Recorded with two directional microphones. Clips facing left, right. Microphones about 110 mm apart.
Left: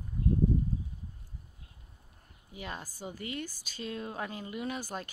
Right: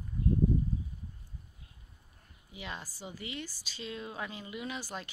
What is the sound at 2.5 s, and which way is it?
Speech, 45° left (ahead or behind).